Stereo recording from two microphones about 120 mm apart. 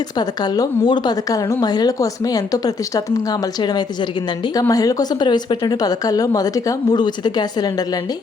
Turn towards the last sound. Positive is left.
turn(degrees=35)  # may be behind; listen again after turning